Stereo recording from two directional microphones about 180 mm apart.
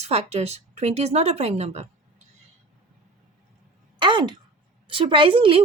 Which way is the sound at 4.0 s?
25° right (ahead or behind).